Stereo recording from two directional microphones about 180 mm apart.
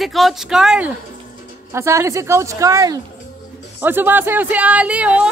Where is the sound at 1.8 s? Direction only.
15° right (ahead or behind).